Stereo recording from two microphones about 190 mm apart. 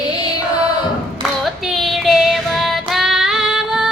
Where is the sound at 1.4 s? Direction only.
Centre (ahead or behind).